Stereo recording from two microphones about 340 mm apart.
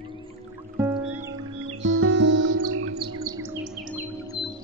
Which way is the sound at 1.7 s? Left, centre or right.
Right.